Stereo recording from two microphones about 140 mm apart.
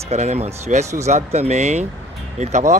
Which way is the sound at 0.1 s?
55° right (ahead or behind).